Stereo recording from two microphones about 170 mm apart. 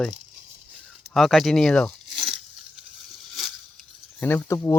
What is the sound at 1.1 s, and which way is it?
Speech, centre (ahead or behind).